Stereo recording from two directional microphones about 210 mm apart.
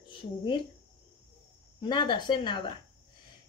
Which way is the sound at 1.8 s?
20° left (ahead or behind).